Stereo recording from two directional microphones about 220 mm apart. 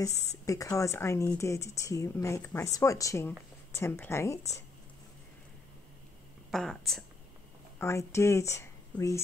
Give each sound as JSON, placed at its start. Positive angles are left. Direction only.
{"t": 0.1, "sound": "speech", "side_deg": 30}
{"t": 0.5, "sound": "a woman's voice", "side_deg": 15}
{"t": 6.5, "sound": "speech", "side_deg": 0}
{"t": 7.8, "sound": "speech", "side_deg": 10}